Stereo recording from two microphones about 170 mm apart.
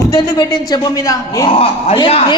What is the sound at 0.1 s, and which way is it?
A woman's voice, 25° left (ahead or behind).